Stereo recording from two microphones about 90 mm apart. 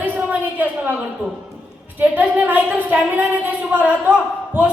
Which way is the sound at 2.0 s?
20° right (ahead or behind).